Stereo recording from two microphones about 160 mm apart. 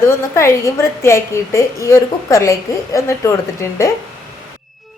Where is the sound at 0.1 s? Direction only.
15° left (ahead or behind).